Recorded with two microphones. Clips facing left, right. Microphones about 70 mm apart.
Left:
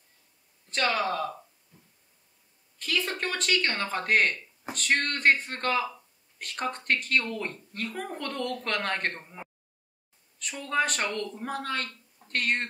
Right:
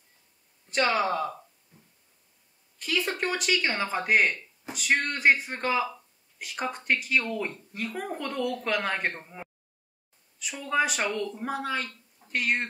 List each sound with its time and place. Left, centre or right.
0.7 s speech: centre
2.8 s speech: centre